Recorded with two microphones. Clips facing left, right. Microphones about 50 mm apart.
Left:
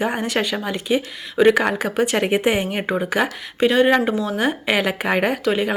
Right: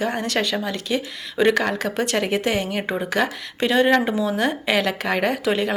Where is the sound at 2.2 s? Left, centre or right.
Left.